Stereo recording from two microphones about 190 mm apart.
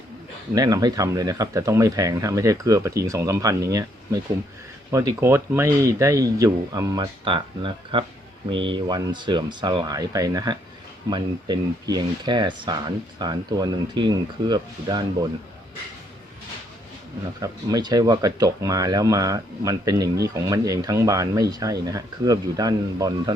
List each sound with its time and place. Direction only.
0.5 s speech: 20° right (ahead or behind)
17.4 s speech: 20° right (ahead or behind)